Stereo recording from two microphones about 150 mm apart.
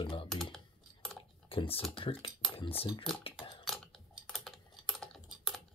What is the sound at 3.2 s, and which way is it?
Typing, 35° left (ahead or behind).